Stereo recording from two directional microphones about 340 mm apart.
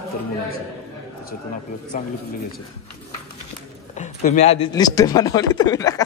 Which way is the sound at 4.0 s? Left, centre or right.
Centre.